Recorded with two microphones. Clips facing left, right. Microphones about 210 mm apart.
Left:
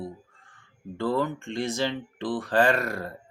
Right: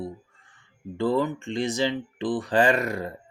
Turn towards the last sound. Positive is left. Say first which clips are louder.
# right 1 dB
turn(degrees=-15)  # may be behind; listen again after turning